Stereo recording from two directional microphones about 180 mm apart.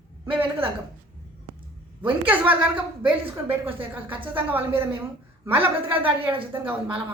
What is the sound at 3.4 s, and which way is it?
Speech, 30° right (ahead or behind).